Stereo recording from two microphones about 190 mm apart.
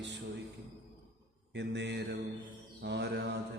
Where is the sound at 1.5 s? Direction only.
65° right (ahead or behind).